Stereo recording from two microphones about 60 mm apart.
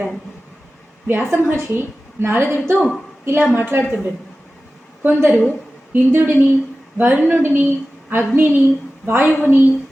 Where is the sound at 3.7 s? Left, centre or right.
Right.